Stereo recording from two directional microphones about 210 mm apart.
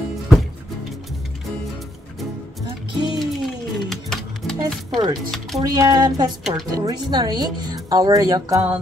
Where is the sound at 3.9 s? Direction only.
Centre (ahead or behind).